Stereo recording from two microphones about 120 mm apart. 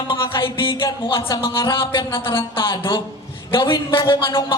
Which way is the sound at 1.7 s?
40° left (ahead or behind).